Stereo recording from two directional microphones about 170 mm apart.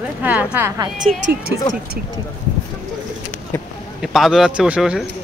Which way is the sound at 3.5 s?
15° left (ahead or behind).